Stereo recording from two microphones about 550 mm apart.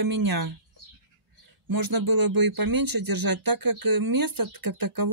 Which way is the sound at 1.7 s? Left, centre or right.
Right.